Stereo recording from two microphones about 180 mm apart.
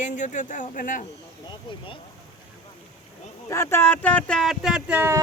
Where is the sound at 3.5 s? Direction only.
15° left (ahead or behind); by 5.2 s 10° right (ahead or behind).